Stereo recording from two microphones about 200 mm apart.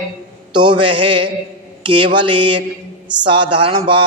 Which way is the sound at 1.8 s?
25° right (ahead or behind).